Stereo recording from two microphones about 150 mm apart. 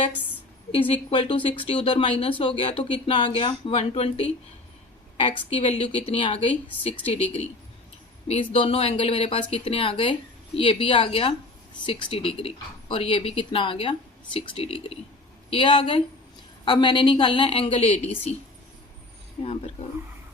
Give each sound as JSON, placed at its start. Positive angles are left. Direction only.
{"t": 0.7, "sound": "a woman's voice", "side_deg": 35}
{"t": 5.5, "sound": "a woman's voice", "side_deg": 40}
{"t": 8.3, "sound": "a woman's voice", "side_deg": 40}